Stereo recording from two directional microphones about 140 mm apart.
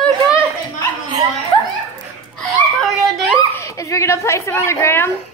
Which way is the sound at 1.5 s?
35° left (ahead or behind).